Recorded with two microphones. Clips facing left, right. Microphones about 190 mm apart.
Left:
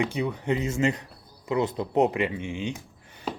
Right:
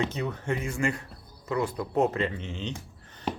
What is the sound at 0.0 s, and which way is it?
Speech, 15° left (ahead or behind).